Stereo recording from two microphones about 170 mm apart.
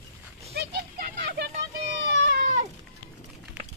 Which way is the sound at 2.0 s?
90° right.